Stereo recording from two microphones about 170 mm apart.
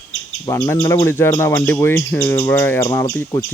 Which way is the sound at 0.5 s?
15° left (ahead or behind).